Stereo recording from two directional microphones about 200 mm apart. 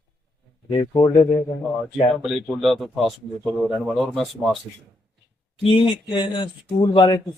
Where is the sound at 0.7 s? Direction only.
25° left (ahead or behind).